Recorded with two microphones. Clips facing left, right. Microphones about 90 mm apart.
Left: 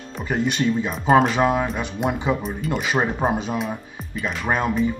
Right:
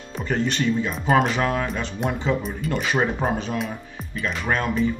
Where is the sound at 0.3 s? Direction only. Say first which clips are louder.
Left 1 dB; 15° left (ahead or behind).